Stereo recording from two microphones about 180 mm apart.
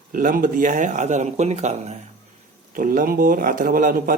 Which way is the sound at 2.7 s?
50° right (ahead or behind).